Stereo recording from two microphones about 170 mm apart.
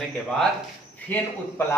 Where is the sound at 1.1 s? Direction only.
10° left (ahead or behind).